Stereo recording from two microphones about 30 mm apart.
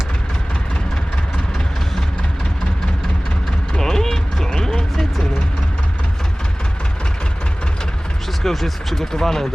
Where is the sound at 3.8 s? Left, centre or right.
Centre.